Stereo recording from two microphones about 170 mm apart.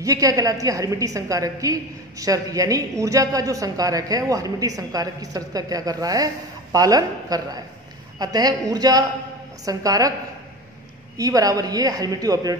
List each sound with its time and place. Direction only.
0.0 s a woman's voice: 20° right (ahead or behind)
11.1 s a woman's voice: 20° right (ahead or behind)